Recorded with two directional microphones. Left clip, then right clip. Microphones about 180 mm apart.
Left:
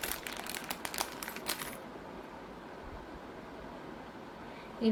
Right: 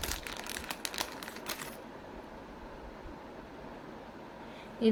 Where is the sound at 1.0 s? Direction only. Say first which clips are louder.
Left 1 dB; 5° left (ahead or behind).